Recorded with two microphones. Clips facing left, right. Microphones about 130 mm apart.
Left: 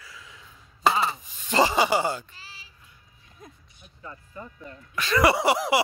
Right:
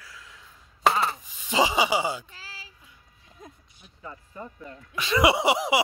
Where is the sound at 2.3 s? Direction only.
90° right.